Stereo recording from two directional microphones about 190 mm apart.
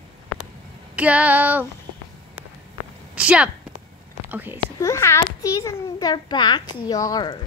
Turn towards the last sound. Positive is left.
turn(degrees=20)  # may be behind; listen again after turning